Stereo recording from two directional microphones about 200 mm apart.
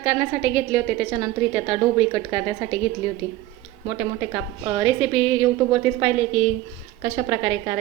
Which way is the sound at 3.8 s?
15° right (ahead or behind).